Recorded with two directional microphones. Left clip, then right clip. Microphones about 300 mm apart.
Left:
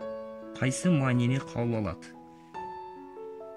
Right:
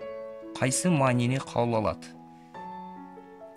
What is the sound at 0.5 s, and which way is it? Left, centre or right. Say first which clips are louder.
Speech: right 3 dB; centre.